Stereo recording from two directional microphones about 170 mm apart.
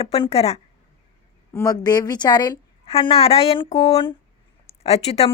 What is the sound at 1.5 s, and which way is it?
A woman's voice, 20° left (ahead or behind).